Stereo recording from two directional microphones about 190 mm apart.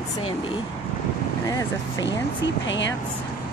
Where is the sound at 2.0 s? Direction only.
70° left (ahead or behind).